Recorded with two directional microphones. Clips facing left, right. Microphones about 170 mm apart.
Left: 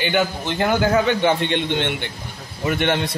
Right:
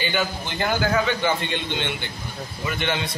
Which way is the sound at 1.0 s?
65° left (ahead or behind).